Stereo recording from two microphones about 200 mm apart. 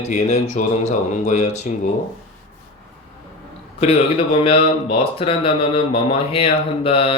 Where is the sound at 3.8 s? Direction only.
30° left (ahead or behind).